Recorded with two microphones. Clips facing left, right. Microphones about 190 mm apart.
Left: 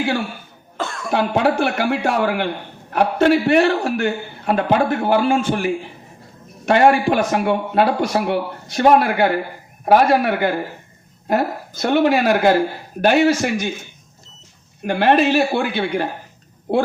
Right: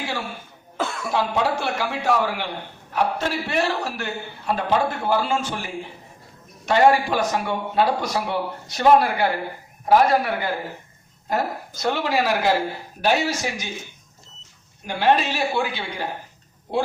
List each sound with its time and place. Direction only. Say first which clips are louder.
0.8 s cough: even; 5° right (ahead or behind)
1.1 s a man's voice: left 6 dB; 60° left (ahead or behind)
14.8 s a man's voice: left 5 dB; 60° left (ahead or behind)